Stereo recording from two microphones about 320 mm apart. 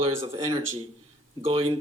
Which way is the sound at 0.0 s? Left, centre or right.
Centre.